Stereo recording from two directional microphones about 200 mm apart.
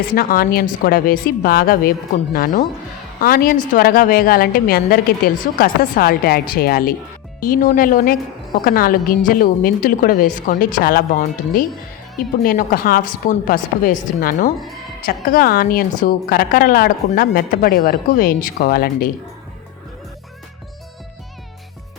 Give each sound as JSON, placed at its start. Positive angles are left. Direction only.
{"t": 0.1, "sound": "a woman's voice", "side_deg": 45}